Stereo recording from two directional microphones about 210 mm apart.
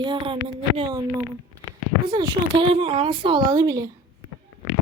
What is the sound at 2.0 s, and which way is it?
A woman's voice, 20° right (ahead or behind).